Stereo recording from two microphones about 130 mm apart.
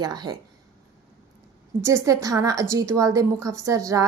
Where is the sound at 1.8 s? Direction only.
25° right (ahead or behind).